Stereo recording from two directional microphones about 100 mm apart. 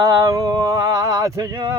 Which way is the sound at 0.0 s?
35° right (ahead or behind).